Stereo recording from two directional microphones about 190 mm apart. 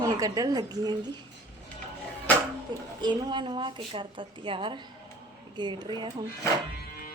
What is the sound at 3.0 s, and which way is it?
A woman's voice, 25° right (ahead or behind).